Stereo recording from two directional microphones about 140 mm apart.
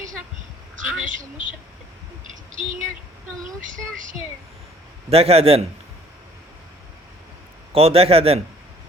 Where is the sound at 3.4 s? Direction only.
70° right (ahead or behind).